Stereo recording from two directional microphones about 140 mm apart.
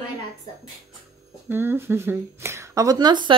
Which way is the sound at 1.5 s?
15° right (ahead or behind).